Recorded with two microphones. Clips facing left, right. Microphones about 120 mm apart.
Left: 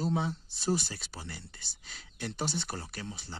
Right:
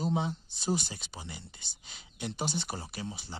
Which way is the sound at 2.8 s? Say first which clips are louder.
Right 1 dB; 20° right (ahead or behind).